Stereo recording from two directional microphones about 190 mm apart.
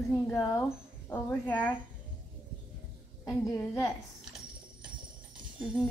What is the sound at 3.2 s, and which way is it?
Speech, 15° left (ahead or behind).